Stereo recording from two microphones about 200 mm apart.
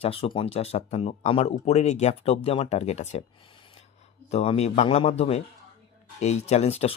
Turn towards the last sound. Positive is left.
turn(degrees=30)  # may be behind; listen again after turning